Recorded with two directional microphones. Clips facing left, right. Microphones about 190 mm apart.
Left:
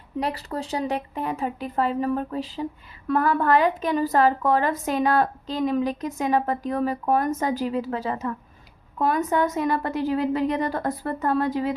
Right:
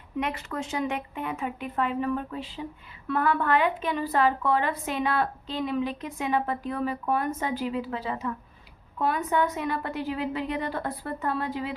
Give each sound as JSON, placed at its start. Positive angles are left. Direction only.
{"t": 0.2, "sound": "a woman's voice", "side_deg": 35}